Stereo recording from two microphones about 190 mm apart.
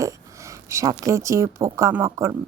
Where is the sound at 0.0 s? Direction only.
15° right (ahead or behind).